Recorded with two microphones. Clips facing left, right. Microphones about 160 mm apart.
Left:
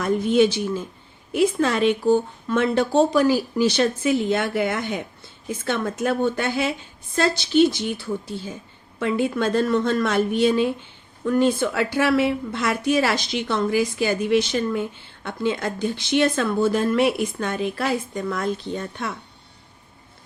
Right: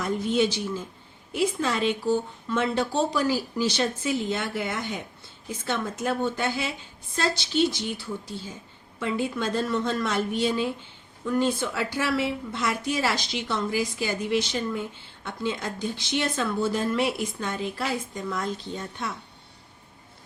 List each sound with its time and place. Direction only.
0.0 s a woman's voice: 60° left (ahead or behind)